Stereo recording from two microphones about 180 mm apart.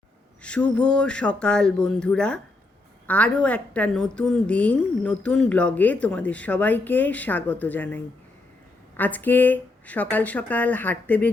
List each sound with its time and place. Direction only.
0.4 s a woman's voice: 5° left (ahead or behind)